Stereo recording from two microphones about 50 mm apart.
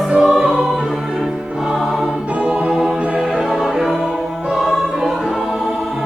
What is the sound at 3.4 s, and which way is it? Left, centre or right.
Music, centre.